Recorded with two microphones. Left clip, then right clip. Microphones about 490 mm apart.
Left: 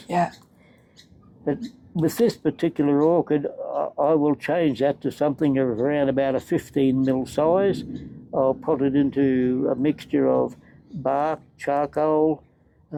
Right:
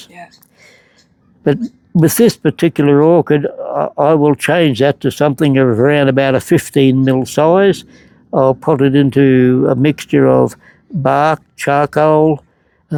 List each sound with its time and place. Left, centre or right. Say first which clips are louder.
2.0 s speech: right 10 dB; right